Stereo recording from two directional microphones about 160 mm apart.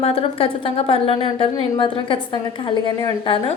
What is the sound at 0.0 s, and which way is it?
A woman's voice, 35° left (ahead or behind).